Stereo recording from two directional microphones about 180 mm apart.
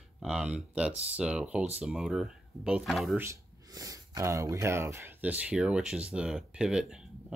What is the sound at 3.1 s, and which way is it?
Speech, 15° right (ahead or behind).